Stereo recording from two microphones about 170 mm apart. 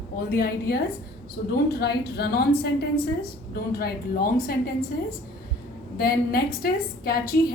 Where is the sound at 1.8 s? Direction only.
70° left (ahead or behind).